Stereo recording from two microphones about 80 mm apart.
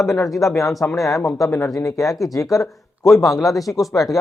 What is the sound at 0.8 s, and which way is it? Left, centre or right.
Speech, centre.